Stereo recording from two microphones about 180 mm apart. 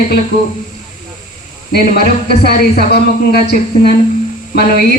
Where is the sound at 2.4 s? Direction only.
60° left (ahead or behind).